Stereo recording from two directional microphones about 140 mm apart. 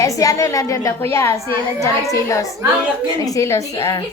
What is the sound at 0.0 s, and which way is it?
A woman's voice, 25° left (ahead or behind).